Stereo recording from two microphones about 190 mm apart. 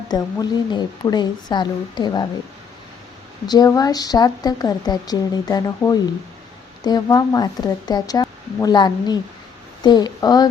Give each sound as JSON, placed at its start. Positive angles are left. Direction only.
{"t": 0.1, "sound": "a woman's voice", "side_deg": 20}
{"t": 3.4, "sound": "a woman's voice", "side_deg": 20}